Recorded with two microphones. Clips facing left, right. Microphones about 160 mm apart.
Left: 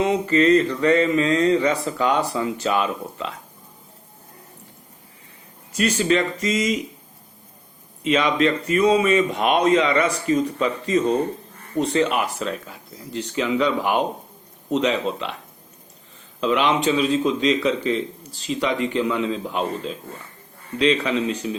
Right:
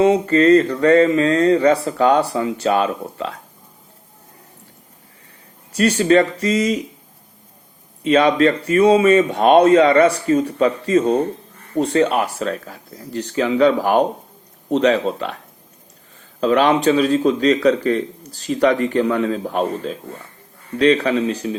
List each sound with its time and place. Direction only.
0.0 s speech: 35° right (ahead or behind)
5.7 s speech: 35° right (ahead or behind)
8.0 s speech: 35° right (ahead or behind)
11.8 s speech: 35° right (ahead or behind)
15.0 s speech: 40° right (ahead or behind)
16.4 s a man's voice: 40° right (ahead or behind)